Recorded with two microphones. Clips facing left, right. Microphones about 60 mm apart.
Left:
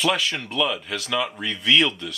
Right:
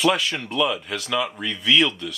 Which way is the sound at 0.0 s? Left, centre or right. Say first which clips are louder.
Right 2 dB; centre.